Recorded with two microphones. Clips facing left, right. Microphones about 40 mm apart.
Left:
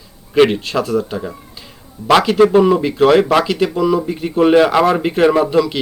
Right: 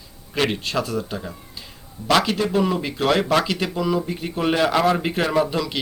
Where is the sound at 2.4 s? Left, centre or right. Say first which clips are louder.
Left 11 dB; left.